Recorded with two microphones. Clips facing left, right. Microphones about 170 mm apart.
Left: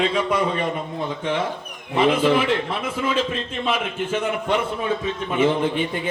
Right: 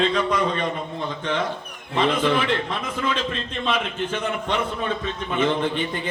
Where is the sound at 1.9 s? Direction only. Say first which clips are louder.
Left 3 dB; 10° left (ahead or behind).